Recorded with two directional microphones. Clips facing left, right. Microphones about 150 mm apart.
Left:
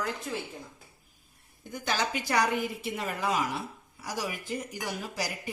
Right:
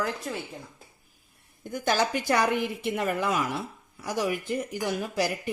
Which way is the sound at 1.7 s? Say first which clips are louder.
Right 5 dB; 45° right (ahead or behind).